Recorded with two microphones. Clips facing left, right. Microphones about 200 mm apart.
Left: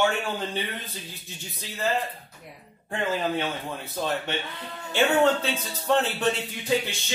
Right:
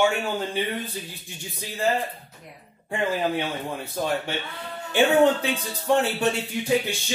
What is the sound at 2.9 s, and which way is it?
Speech, 10° right (ahead or behind).